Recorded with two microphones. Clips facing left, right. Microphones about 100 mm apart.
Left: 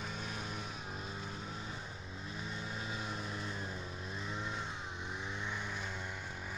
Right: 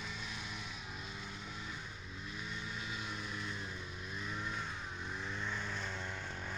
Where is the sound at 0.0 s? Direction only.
45° left (ahead or behind).